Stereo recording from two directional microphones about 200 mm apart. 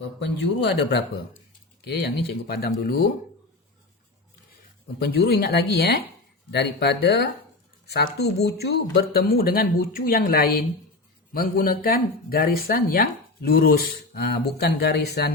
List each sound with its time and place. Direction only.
0.2 s speech: 60° left (ahead or behind)
5.0 s speech: 55° left (ahead or behind)